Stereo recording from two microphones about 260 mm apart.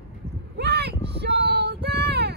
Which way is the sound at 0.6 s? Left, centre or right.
Right.